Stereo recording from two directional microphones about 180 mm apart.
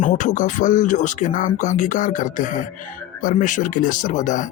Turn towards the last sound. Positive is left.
turn(degrees=45)  # may be behind; listen again after turning